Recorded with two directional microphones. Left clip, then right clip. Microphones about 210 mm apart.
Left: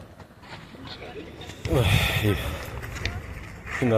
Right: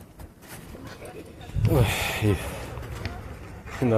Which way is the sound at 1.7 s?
10° right (ahead or behind).